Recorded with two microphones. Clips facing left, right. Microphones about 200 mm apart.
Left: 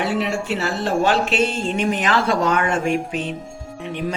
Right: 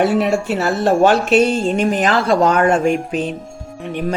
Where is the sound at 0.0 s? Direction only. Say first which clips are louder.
Right 7 dB; 45° right (ahead or behind).